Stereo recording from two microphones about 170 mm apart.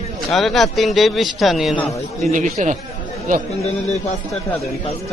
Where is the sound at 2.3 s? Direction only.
45° right (ahead or behind).